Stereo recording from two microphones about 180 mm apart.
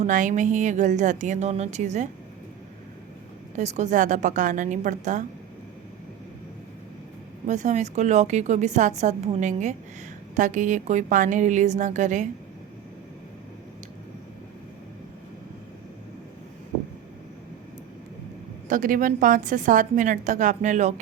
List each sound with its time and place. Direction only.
0.0 s a woman's voice: 45° right (ahead or behind)
3.6 s a woman's voice: 40° right (ahead or behind)
7.4 s a woman's voice: 40° right (ahead or behind)
18.7 s a woman's voice: 45° right (ahead or behind)